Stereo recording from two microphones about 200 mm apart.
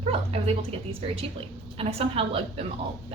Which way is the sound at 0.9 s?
30° right (ahead or behind).